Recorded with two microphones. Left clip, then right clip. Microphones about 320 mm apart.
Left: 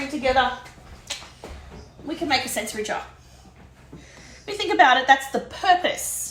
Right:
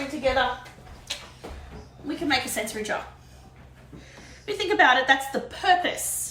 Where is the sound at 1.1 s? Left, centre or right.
Centre.